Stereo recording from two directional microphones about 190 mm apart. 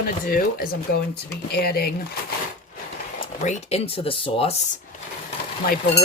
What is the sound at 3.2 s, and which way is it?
Speech, 40° left (ahead or behind).